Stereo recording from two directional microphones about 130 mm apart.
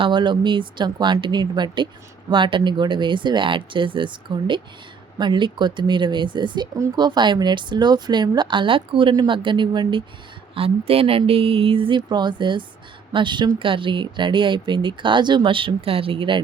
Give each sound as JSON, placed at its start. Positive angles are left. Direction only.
{"t": 0.0, "sound": "speech", "side_deg": -35}
{"t": 10.5, "sound": "speech", "side_deg": -45}